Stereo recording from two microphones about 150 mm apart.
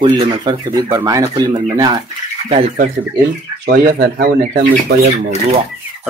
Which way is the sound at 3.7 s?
85° right.